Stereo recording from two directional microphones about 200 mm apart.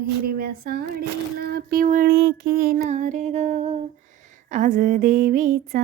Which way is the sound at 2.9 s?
35° right (ahead or behind).